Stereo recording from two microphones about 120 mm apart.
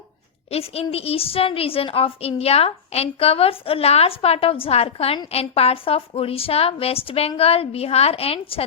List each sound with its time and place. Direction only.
0.5 s a woman's voice: 55° left (ahead or behind)